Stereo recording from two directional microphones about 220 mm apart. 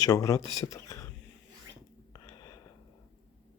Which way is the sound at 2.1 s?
15° left (ahead or behind).